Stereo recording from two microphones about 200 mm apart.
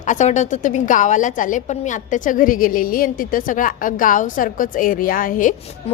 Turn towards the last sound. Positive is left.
turn(degrees=40)  # may be behind; listen again after turning